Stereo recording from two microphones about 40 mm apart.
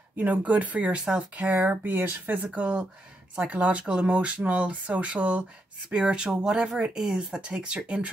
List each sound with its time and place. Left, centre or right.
0.2 s speech: right
1.5 s speech: right
2.5 s speech: right